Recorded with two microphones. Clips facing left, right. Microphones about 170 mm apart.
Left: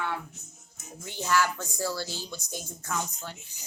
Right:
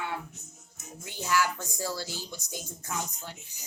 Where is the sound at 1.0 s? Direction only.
15° right (ahead or behind).